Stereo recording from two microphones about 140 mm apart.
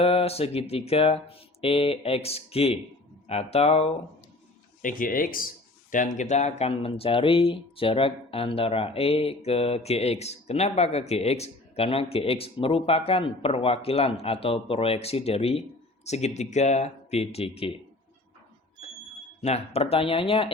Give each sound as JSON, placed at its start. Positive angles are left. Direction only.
{"t": 0.0, "sound": "speech", "side_deg": 45}
{"t": 4.8, "sound": "speech", "side_deg": 75}
{"t": 5.9, "sound": "speech", "side_deg": 65}
{"t": 19.4, "sound": "speech", "side_deg": 50}